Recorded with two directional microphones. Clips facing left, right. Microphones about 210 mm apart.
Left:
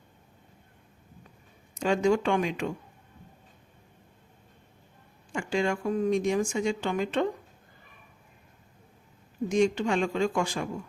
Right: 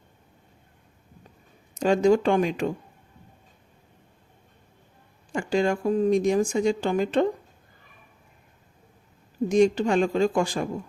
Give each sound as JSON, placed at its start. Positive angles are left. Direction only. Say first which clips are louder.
{"t": 1.8, "sound": "speech", "louder": "right 5 dB", "side_deg": -35}
{"t": 5.3, "sound": "speech", "louder": "right 4 dB", "side_deg": -40}
{"t": 9.5, "sound": "speech", "louder": "right 5 dB", "side_deg": -35}